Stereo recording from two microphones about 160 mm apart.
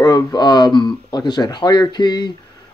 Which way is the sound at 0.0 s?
25° left (ahead or behind).